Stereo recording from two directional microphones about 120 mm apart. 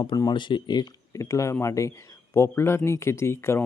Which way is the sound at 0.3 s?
40° left (ahead or behind).